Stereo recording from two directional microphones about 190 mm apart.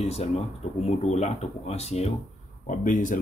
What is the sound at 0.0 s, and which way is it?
Speech, 35° left (ahead or behind).